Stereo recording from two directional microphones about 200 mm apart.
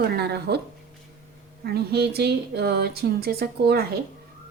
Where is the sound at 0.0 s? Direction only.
55° right (ahead or behind).